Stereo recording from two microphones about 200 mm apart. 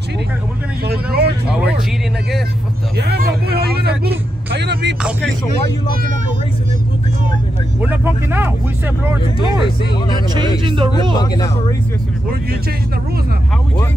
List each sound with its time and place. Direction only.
0.8 s speech: 55° right (ahead or behind)
3.0 s vehicle: 55° right (ahead or behind)
4.5 s music: 60° right (ahead or behind)
8.0 s speech: 10° right (ahead or behind)
9.2 s speech: 25° left (ahead or behind)
10.6 s speech: 25° right (ahead or behind)
11.1 s speech: 20° left (ahead or behind)